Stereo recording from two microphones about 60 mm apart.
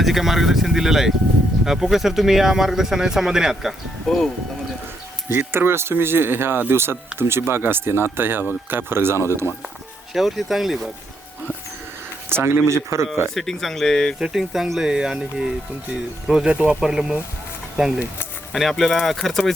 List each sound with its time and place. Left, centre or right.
0.0 s speech: centre
5.3 s speech: right
10.2 s speech: centre
12.3 s speech: right
13.3 s speech: centre
14.2 s speech: centre
16.5 s speech: right
16.8 s speech: centre
18.5 s speech: centre